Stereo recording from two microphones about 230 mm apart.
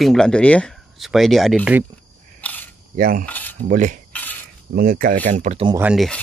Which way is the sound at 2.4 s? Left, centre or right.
Centre.